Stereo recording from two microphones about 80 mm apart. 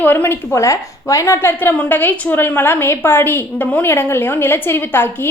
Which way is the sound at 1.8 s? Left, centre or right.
Left.